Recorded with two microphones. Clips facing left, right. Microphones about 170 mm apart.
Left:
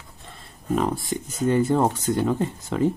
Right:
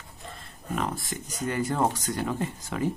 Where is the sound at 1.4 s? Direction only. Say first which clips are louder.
Left 6 dB; 25° left (ahead or behind).